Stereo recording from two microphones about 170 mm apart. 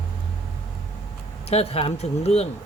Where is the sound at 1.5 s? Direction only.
35° left (ahead or behind).